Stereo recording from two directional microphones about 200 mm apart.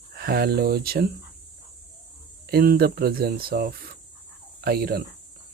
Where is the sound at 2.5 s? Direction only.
50° right (ahead or behind).